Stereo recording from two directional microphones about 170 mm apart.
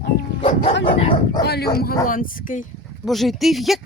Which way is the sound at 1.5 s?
70° left (ahead or behind).